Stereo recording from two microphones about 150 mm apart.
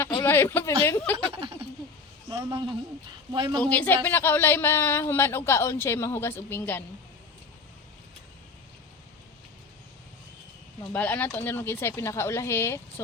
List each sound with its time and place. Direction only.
0.3 s speech: 15° left (ahead or behind)
1.3 s a man's voice: 35° right (ahead or behind)
3.6 s speech: 10° left (ahead or behind)
10.9 s speech: 10° left (ahead or behind)